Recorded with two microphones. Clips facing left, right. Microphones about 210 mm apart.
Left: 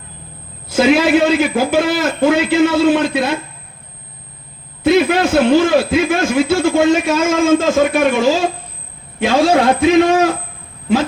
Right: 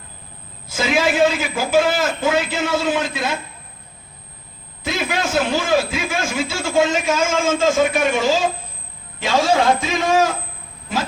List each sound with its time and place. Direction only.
0.7 s a man's voice: 60° left (ahead or behind)
4.8 s a man's voice: 60° left (ahead or behind)